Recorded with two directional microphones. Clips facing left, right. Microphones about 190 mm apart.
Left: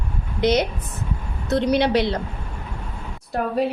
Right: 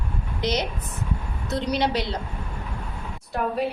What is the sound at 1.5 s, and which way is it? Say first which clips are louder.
Speech: left 6 dB; 60° left (ahead or behind).